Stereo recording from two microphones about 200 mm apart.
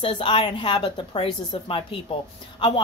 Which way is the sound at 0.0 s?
25° left (ahead or behind).